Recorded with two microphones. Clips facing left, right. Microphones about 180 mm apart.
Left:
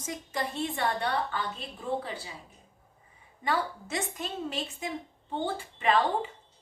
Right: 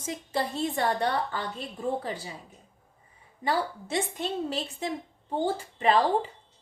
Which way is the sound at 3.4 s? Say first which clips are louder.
Right 2 dB; 30° right (ahead or behind).